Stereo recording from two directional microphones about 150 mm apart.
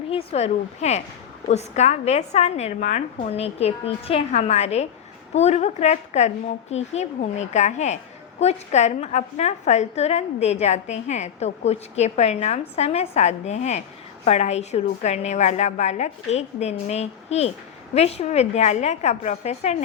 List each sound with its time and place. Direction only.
0.1 s a woman's voice: 40° left (ahead or behind)